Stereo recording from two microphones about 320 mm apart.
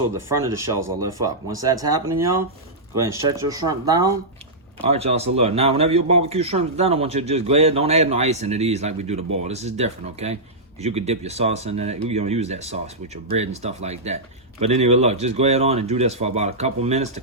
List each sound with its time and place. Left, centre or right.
0.4 s a man's voice: centre